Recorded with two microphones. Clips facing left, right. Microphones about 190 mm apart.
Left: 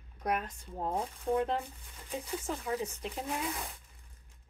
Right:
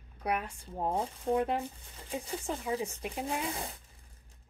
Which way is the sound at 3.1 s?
25° right (ahead or behind).